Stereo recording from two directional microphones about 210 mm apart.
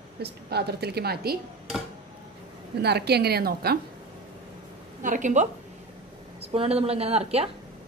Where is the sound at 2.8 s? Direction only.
50° right (ahead or behind).